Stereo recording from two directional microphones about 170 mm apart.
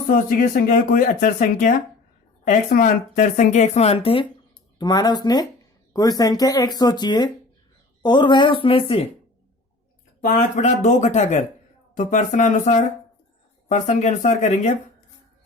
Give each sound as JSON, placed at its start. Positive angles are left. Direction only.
{"t": 0.1, "sound": "speech", "side_deg": 55}
{"t": 10.2, "sound": "speech", "side_deg": 45}